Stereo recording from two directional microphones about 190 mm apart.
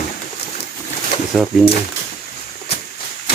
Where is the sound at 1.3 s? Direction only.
Centre (ahead or behind).